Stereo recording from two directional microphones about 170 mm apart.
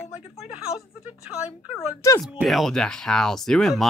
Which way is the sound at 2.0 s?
15° left (ahead or behind).